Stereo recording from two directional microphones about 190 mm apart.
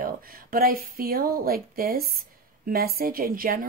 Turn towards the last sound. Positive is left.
turn(degrees=-50)  # may be behind; listen again after turning